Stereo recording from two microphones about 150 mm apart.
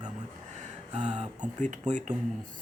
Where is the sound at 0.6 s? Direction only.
50° right (ahead or behind).